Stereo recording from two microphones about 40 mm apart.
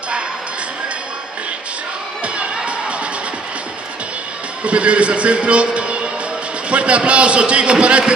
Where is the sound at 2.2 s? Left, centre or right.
Right.